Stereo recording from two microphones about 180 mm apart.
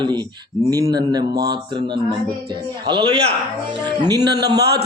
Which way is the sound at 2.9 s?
25° right (ahead or behind).